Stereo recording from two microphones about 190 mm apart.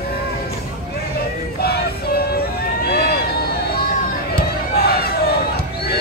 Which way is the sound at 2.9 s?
55° left (ahead or behind).